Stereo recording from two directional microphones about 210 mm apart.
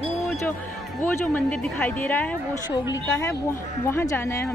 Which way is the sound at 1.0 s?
10° left (ahead or behind).